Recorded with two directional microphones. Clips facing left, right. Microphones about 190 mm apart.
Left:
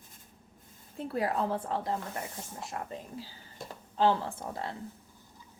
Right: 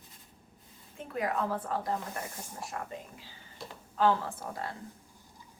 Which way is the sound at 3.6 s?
50° left (ahead or behind).